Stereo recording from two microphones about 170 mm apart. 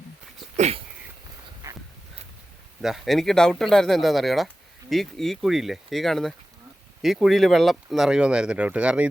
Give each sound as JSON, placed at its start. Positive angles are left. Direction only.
{"t": 0.5, "sound": "speech", "side_deg": -40}
{"t": 2.8, "sound": "speech", "side_deg": 0}